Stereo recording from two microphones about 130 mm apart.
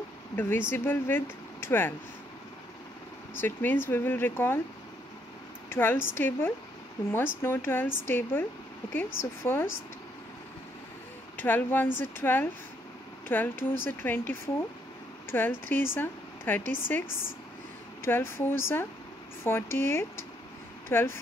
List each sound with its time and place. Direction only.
0.4 s speech: 15° left (ahead or behind)
3.3 s speech: 15° left (ahead or behind)
5.7 s speech: 15° left (ahead or behind)
11.3 s speech: 15° left (ahead or behind)
15.3 s speech: 15° left (ahead or behind)